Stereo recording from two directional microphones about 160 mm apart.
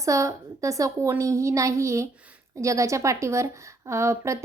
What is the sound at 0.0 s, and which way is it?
A woman's voice, 20° right (ahead or behind).